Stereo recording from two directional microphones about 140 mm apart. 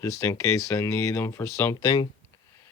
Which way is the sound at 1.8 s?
30° left (ahead or behind).